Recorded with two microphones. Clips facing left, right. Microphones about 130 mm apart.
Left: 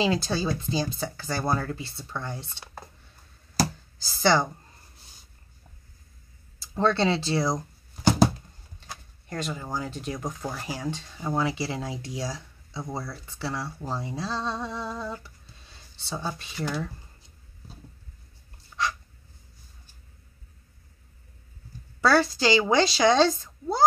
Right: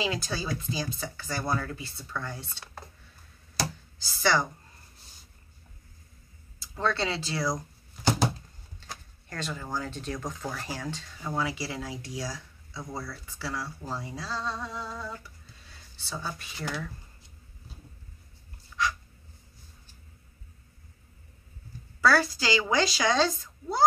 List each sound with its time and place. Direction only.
0.0 s speech: 30° left (ahead or behind)
4.2 s speech: 30° left (ahead or behind)
6.6 s speech: 30° left (ahead or behind)
9.3 s speech: 20° left (ahead or behind)
22.0 s speech: 25° left (ahead or behind)